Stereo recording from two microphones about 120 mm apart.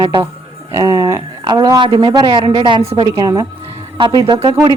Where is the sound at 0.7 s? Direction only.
25° right (ahead or behind).